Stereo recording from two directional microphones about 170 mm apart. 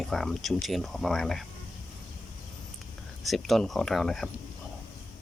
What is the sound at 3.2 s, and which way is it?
Speech, centre (ahead or behind).